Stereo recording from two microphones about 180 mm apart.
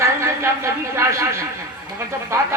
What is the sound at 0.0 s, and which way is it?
Speech, 15° right (ahead or behind).